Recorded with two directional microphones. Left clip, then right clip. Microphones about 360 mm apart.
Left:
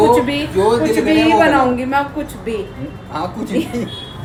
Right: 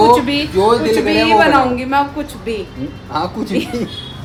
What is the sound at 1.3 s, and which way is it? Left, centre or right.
Speech, centre.